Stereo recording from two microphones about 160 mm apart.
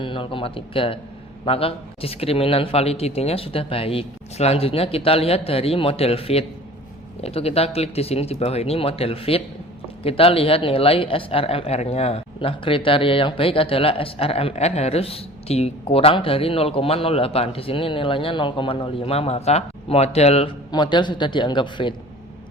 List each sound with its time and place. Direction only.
0.0 s speech: 35° left (ahead or behind)
20.7 s a man's voice: 30° left (ahead or behind)